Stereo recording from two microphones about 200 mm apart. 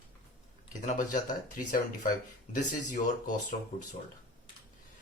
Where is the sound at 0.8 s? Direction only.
40° left (ahead or behind).